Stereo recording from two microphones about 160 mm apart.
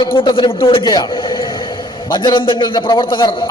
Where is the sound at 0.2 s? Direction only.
30° left (ahead or behind).